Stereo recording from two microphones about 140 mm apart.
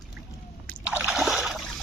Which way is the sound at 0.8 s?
10° right (ahead or behind).